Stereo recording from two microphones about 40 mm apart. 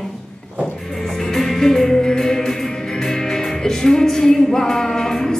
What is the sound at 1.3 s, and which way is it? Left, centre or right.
Music, centre.